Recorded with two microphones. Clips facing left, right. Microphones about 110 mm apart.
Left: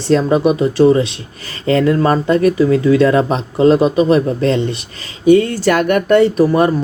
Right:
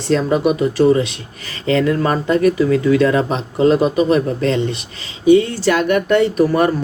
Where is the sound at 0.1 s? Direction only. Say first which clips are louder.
Left 3 dB; 30° left (ahead or behind).